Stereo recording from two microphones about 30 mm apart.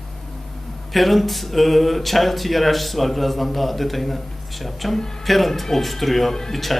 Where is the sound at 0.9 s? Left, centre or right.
Centre.